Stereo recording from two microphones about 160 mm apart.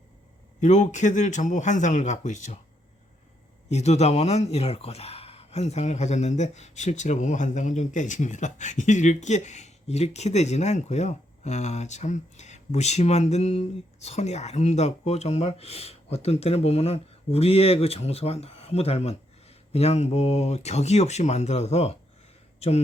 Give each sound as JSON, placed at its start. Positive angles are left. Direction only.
{"t": 0.6, "sound": "speech", "side_deg": 50}
{"t": 3.7, "sound": "speech", "side_deg": 45}